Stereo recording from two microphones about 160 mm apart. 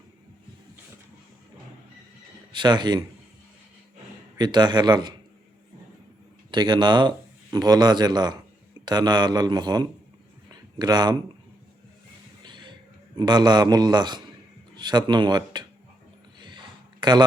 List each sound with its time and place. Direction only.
2.5 s speech: 30° right (ahead or behind)
4.4 s speech: 25° right (ahead or behind)
6.5 s speech: 30° right (ahead or behind)
10.5 s a sound: 25° right (ahead or behind)
12.4 s music: 30° right (ahead or behind)
13.1 s speech: 25° right (ahead or behind)
16.4 s a sound: 30° right (ahead or behind)